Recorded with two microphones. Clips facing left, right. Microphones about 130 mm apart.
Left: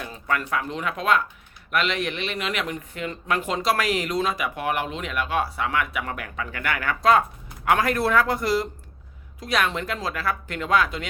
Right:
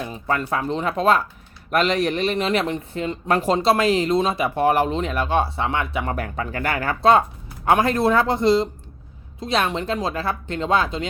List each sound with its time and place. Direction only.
0.0 s speech: 25° right (ahead or behind)